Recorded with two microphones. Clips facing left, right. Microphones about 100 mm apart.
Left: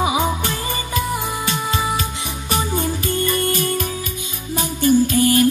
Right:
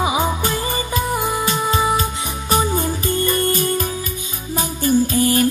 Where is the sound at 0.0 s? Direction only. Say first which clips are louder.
Even; 30° right (ahead or behind).